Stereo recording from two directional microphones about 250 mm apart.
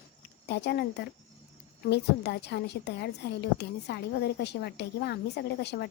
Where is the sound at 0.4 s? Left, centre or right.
Left.